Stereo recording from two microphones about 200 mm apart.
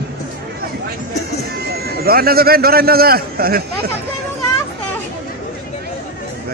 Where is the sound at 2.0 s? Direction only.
50° right (ahead or behind).